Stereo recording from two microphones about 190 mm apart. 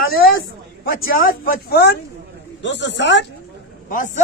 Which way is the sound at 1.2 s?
50° left (ahead or behind).